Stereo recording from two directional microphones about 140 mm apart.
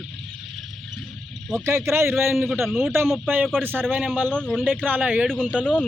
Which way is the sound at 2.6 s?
Centre (ahead or behind).